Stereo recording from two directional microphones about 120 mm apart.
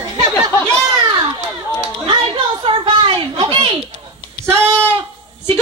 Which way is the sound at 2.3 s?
45° right (ahead or behind).